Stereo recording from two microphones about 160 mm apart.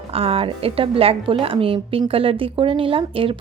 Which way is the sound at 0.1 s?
35° right (ahead or behind).